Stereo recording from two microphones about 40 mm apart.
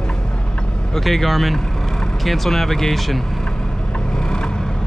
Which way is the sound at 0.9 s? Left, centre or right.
Centre.